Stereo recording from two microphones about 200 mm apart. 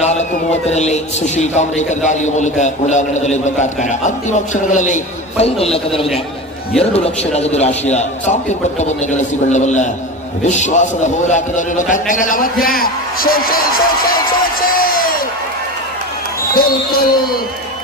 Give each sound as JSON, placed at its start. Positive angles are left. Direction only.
{"t": 0.7, "sound": "a man's voice", "side_deg": 35}
{"t": 14.6, "sound": "a sound", "side_deg": 45}
{"t": 16.5, "sound": "a man's voice", "side_deg": 50}